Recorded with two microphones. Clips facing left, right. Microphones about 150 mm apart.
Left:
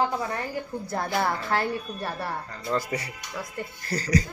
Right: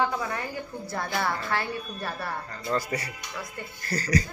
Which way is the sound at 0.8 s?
40° left (ahead or behind).